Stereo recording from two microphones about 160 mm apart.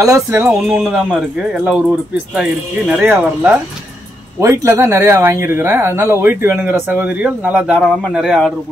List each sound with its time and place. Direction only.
0.0 s speech: 20° right (ahead or behind)
4.4 s speech: 20° right (ahead or behind); by 8.5 s centre (ahead or behind)